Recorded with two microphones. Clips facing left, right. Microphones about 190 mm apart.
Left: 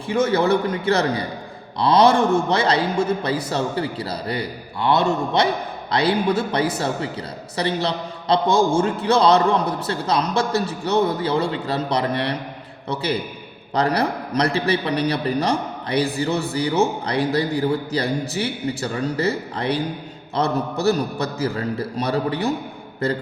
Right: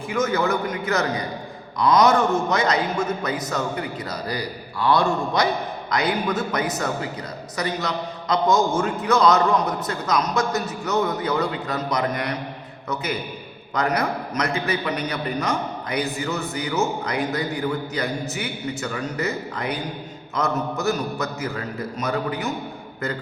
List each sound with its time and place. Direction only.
0.1 s a man's voice: 30° left (ahead or behind)